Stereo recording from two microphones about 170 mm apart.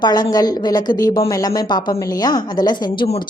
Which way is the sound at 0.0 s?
25° left (ahead or behind).